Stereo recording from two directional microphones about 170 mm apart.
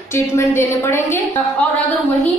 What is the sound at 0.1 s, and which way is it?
A woman's voice, 15° left (ahead or behind).